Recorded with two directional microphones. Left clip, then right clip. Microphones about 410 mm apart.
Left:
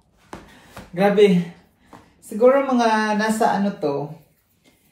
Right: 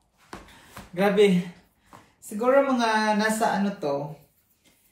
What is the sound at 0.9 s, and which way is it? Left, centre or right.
Speech, centre.